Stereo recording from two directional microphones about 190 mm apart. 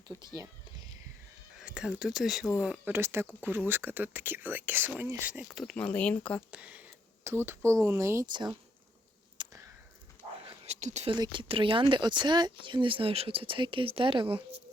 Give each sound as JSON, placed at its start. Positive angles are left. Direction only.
{"t": 0.1, "sound": "speech", "side_deg": 10}
{"t": 1.5, "sound": "speech", "side_deg": -5}
{"t": 6.5, "sound": "speech", "side_deg": -5}
{"t": 9.4, "sound": "a sound", "side_deg": -25}
{"t": 10.2, "sound": "whispering", "side_deg": 10}
{"t": 10.7, "sound": "speech", "side_deg": -40}
{"t": 11.1, "sound": "speech", "side_deg": -25}